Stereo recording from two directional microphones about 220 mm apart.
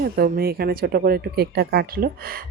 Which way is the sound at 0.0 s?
45° right (ahead or behind).